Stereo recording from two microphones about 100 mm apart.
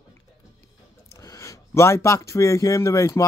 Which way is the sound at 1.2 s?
30° left (ahead or behind).